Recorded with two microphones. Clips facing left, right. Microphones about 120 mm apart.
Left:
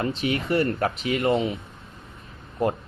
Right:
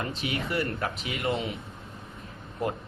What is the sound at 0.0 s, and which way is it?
A man's voice, 45° left (ahead or behind).